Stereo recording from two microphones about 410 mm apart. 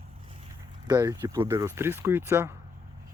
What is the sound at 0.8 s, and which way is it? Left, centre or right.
Speech, centre.